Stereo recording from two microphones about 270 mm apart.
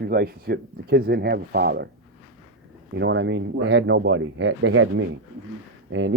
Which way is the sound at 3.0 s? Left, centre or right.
Right.